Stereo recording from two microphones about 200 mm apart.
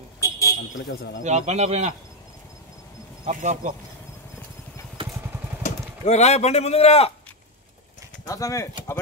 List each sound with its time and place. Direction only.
0.2 s a sound: 15° left (ahead or behind)
0.8 s speech: 60° left (ahead or behind)
1.2 s a man's voice: 35° right (ahead or behind)
3.3 s a man's voice: 40° right (ahead or behind)
5.6 s speech: 35° left (ahead or behind)
8.3 s speech: 15° left (ahead or behind)